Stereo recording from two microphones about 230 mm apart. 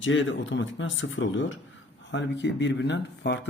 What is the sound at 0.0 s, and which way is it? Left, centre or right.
Speech, left.